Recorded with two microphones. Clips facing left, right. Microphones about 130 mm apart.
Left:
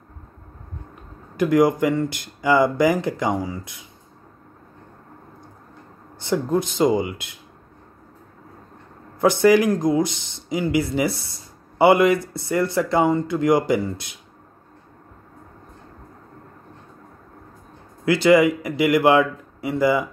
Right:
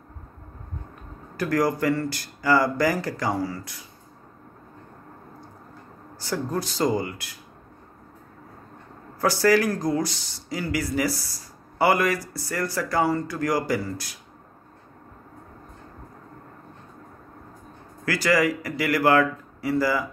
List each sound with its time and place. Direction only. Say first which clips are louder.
1.3 s speech: left 6 dB; 20° left (ahead or behind)
6.1 s speech: left 6 dB; 20° left (ahead or behind)
9.2 s speech: left 5 dB; 20° left (ahead or behind)
18.0 s speech: left 7 dB; 20° left (ahead or behind)